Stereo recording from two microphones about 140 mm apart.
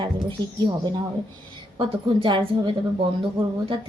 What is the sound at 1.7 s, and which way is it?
A woman's voice, 35° right (ahead or behind).